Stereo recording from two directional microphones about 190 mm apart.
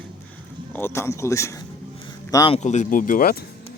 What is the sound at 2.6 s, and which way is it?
Speech, 40° left (ahead or behind).